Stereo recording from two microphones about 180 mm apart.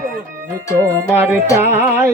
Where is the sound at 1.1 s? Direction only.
10° right (ahead or behind).